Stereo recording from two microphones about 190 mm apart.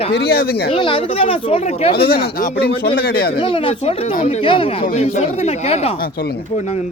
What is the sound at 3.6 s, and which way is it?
Speech, 30° left (ahead or behind).